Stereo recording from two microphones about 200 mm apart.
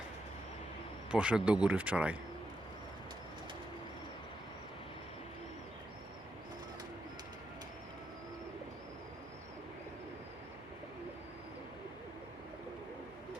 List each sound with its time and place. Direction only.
1.1 s a man's voice: 5° right (ahead or behind)